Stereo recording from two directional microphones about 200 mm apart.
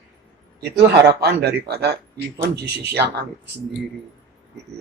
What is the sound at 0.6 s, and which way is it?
A man's voice, 55° right (ahead or behind).